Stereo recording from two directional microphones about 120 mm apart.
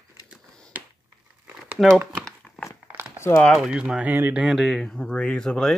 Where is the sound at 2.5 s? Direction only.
15° left (ahead or behind).